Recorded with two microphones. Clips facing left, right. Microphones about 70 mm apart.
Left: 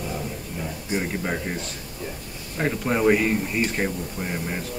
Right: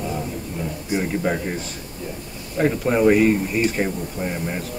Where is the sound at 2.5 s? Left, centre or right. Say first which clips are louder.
Right 5 dB; centre.